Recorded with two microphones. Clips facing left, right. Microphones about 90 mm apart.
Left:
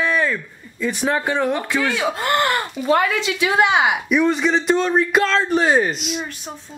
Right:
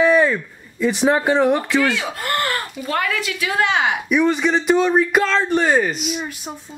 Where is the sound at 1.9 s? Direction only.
20° left (ahead or behind).